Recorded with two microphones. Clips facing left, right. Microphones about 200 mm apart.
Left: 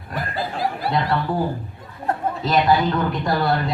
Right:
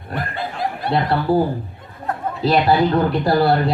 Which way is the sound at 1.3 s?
35° right (ahead or behind).